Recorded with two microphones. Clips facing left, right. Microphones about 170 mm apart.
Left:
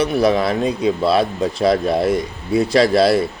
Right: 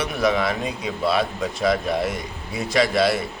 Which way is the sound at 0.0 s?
35° left (ahead or behind).